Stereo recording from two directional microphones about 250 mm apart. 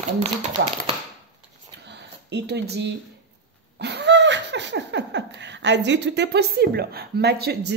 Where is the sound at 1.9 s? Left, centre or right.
Right.